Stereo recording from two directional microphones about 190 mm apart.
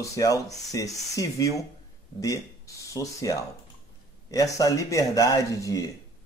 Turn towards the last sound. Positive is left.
turn(degrees=15)  # may be behind; listen again after turning